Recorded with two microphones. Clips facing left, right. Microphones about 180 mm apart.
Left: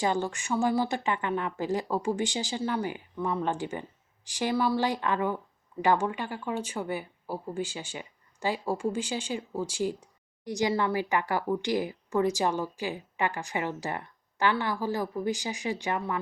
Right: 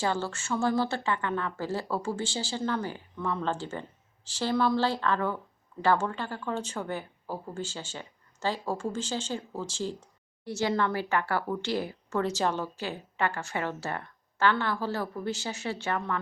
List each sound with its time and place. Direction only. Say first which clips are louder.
0.0 s speech: left 2 dB; 15° left (ahead or behind)